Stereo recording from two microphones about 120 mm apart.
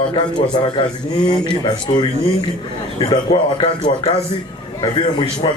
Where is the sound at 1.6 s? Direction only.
35° left (ahead or behind).